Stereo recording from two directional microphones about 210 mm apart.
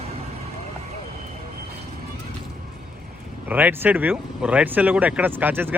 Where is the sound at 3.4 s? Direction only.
10° right (ahead or behind).